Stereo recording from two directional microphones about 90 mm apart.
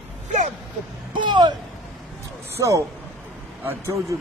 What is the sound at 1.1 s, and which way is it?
Speech, 60° right (ahead or behind).